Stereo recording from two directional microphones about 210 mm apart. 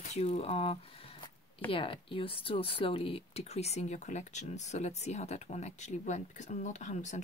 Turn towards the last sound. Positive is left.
turn(degrees=35)  # may be behind; listen again after turning